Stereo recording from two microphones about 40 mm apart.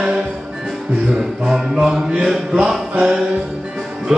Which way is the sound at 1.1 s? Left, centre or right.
Centre.